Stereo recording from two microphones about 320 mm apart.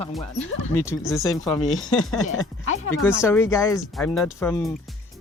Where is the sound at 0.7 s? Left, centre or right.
Centre.